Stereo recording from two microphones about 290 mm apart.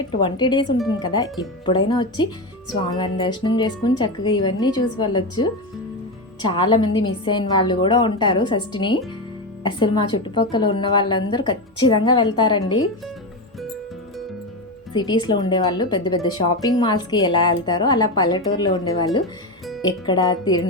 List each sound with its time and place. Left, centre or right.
0.2 s a woman's voice: centre
14.9 s a woman's voice: centre